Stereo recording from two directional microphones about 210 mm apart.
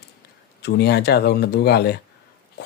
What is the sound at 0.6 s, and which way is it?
Speech, 50° left (ahead or behind).